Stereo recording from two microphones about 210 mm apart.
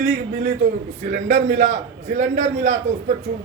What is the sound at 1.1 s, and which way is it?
A man's voice, 35° right (ahead or behind).